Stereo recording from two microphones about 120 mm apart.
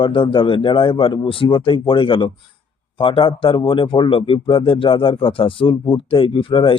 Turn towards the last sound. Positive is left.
turn(degrees=45)  # may be behind; listen again after turning